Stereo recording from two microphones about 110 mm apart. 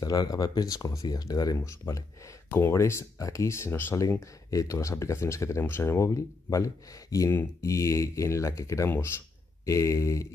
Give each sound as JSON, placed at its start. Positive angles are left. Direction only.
{"t": 0.0, "sound": "speech", "side_deg": 35}